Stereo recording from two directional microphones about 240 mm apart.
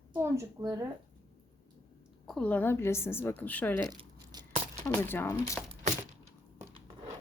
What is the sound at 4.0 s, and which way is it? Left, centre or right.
Tearing, centre.